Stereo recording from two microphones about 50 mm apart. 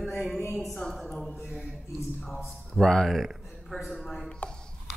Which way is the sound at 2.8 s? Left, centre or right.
Centre.